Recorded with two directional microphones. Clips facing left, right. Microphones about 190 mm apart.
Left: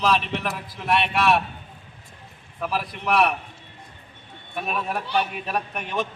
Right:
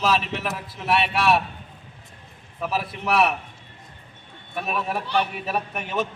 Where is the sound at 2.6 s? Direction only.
Centre (ahead or behind).